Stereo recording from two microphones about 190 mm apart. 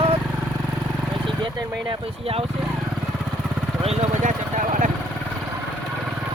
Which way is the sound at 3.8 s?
40° right (ahead or behind).